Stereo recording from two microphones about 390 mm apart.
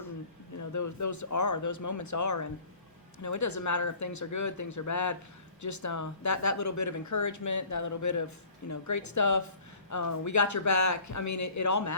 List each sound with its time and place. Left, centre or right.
0.6 s speech: left